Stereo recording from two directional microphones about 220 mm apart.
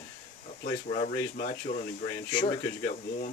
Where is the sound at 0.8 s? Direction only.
35° left (ahead or behind).